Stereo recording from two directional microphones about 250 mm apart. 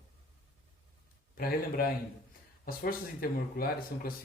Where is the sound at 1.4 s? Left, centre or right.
Left.